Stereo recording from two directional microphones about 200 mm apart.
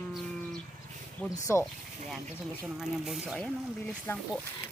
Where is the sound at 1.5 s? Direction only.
10° left (ahead or behind).